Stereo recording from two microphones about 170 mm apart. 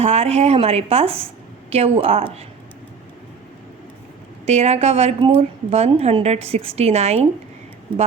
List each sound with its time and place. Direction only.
0.0 s a woman's voice: 40° right (ahead or behind)
4.4 s a woman's voice: 40° right (ahead or behind)